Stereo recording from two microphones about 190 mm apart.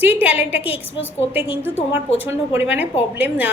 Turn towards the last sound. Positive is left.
turn(degrees=-10)  # may be behind; listen again after turning